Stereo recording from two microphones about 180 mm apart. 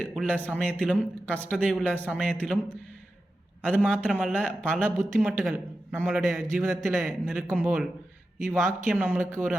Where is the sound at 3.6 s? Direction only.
10° left (ahead or behind).